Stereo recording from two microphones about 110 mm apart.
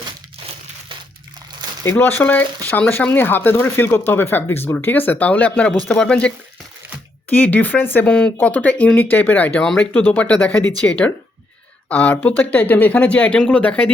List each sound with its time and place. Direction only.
1.8 s speech: 20° left (ahead or behind)